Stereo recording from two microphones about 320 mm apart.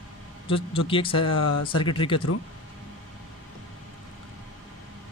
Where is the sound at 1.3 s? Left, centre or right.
Left.